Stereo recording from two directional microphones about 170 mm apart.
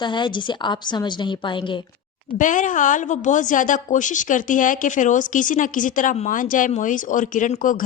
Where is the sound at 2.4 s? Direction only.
50° left (ahead or behind).